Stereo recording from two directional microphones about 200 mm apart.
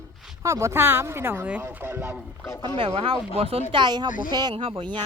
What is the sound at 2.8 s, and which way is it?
Speech, 30° right (ahead or behind).